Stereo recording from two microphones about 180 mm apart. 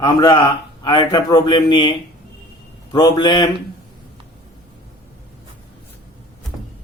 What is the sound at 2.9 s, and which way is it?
Speech, 25° left (ahead or behind).